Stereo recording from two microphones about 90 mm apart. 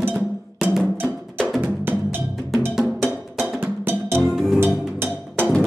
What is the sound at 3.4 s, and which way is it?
Music, 10° right (ahead or behind).